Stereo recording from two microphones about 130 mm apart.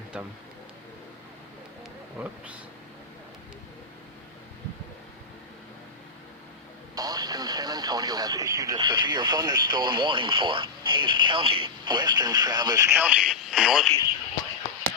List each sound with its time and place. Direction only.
2.1 s speech: 15° right (ahead or behind)
6.9 s speech: 30° right (ahead or behind)
13.0 s speech: 10° right (ahead or behind)